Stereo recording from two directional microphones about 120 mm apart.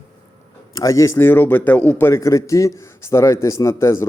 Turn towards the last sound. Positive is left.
turn(degrees=25)  # may be behind; listen again after turning